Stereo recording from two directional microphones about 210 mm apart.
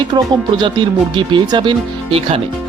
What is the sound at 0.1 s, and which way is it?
Speech, 20° right (ahead or behind).